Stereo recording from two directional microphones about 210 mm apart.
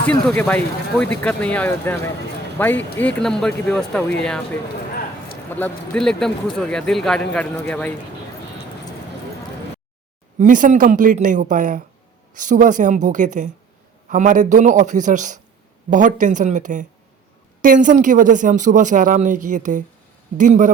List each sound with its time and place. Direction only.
0.1 s speech: 5° left (ahead or behind)
5.5 s speech: 10° left (ahead or behind)
10.3 s speech: 40° right (ahead or behind)